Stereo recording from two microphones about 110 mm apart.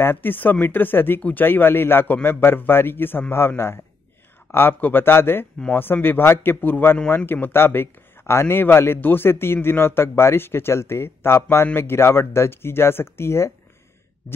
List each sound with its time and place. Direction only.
0.0 s speech: 20° left (ahead or behind)